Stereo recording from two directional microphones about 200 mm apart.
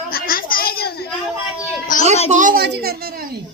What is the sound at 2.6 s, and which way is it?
Speech, 55° right (ahead or behind).